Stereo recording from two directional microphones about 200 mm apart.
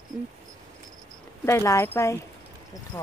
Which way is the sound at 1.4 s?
15° left (ahead or behind).